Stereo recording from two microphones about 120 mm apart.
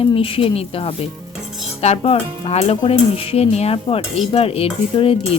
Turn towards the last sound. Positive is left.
turn(degrees=50)  # may be behind; listen again after turning